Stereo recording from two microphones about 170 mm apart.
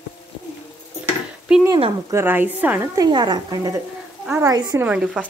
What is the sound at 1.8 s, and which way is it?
Speech, 30° right (ahead or behind).